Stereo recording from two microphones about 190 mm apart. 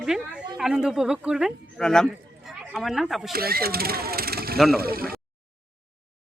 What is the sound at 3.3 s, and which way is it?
Speech, 55° right (ahead or behind).